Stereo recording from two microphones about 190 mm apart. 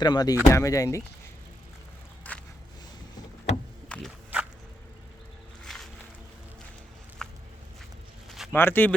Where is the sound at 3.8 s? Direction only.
5° left (ahead or behind).